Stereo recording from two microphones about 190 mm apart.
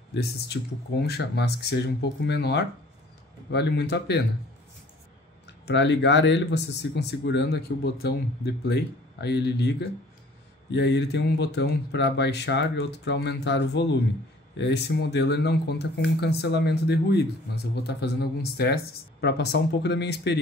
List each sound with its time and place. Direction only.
0.1 s speech: 60° left (ahead or behind)
5.7 s speech: 65° left (ahead or behind)